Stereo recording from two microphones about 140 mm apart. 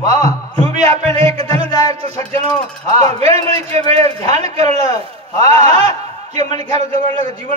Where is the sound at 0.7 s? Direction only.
50° right (ahead or behind).